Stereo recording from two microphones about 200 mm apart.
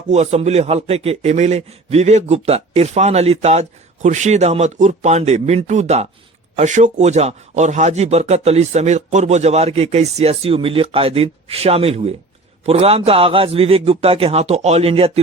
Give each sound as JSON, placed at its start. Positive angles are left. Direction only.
{"t": 0.1, "sound": "a man's voice", "side_deg": -35}